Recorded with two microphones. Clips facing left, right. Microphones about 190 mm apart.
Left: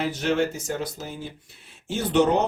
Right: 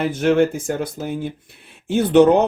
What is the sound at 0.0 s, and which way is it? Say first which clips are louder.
Speech: right 7 dB; 55° right (ahead or behind).